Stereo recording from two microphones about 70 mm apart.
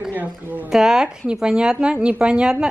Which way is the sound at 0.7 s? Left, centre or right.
Centre.